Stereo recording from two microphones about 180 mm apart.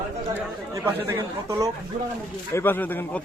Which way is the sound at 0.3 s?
15° right (ahead or behind).